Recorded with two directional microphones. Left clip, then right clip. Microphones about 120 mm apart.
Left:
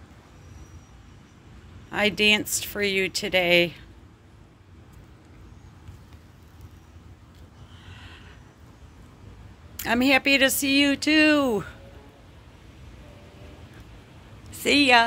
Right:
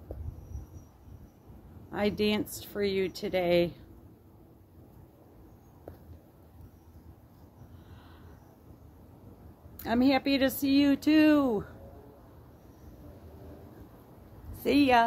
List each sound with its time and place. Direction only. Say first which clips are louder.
1.9 s speech: left 9 dB; centre (ahead or behind)
9.8 s speech: left 6 dB; 5° left (ahead or behind); by 11.3 s 15° right (ahead or behind)
14.6 s speech: left 6 dB; 15° left (ahead or behind)